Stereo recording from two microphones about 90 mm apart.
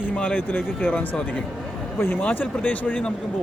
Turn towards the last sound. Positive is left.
turn(degrees=15)  # may be behind; listen again after turning